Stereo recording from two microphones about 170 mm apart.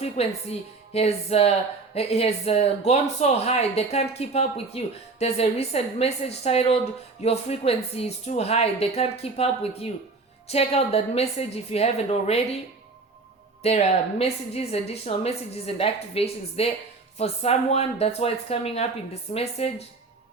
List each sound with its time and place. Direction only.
0.2 s a woman's voice: 35° left (ahead or behind)
13.6 s a woman's voice: 40° left (ahead or behind)